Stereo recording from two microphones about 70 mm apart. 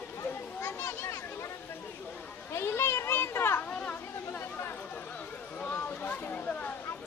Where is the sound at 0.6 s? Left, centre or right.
Left.